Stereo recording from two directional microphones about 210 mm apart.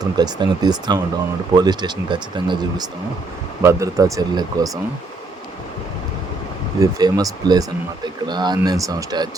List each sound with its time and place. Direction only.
0.0 s speech: 20° right (ahead or behind)
6.7 s speech: 15° right (ahead or behind)